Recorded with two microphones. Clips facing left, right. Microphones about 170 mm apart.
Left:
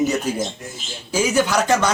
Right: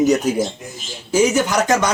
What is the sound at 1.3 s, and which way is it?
Speech, 20° right (ahead or behind).